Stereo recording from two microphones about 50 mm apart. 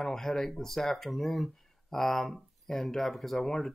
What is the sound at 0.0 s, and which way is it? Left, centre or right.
Speech, centre.